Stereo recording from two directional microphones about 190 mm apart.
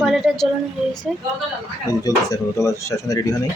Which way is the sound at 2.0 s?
15° left (ahead or behind).